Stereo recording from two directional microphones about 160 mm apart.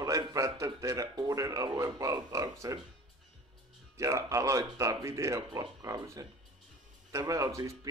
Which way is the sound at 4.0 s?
20° right (ahead or behind).